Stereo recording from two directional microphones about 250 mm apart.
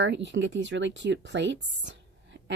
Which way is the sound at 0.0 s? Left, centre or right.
Right.